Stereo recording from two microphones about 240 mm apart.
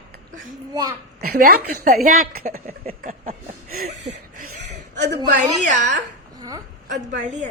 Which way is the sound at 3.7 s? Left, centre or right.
Right.